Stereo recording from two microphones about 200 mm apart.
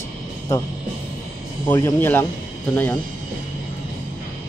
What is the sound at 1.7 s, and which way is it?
Speech, 10° left (ahead or behind).